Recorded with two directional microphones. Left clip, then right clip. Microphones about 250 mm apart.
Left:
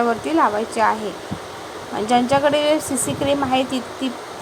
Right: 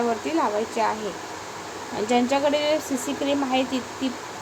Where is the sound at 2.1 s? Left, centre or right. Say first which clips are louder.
Left 5 dB; centre.